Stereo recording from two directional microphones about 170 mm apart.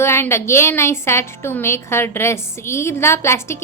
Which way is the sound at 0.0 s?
15° left (ahead or behind).